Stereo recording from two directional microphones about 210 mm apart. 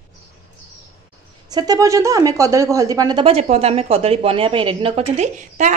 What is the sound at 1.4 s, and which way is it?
Speech, 20° right (ahead or behind).